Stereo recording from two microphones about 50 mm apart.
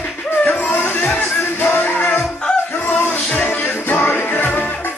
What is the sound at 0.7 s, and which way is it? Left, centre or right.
Music, left.